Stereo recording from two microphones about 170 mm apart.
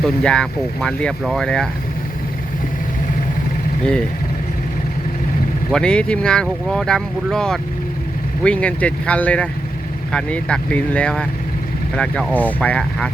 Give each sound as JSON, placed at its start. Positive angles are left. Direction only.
{"t": 0.0, "sound": "speech", "side_deg": 5}
{"t": 5.7, "sound": "speech", "side_deg": 5}